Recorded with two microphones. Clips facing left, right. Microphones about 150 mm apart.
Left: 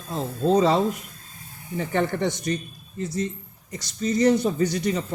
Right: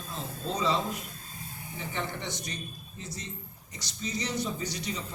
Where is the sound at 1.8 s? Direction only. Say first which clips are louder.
Left 12 dB; 55° left (ahead or behind).